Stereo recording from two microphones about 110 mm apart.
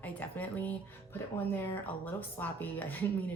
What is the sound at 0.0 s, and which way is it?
A woman's voice, 15° left (ahead or behind).